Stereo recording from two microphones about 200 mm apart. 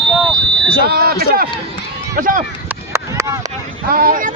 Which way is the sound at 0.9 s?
50° right (ahead or behind).